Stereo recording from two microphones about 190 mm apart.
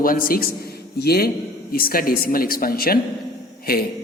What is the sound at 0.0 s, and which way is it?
A man's voice, 50° left (ahead or behind).